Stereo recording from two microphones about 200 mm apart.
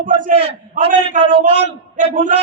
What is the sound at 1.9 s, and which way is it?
Speech, 40° right (ahead or behind).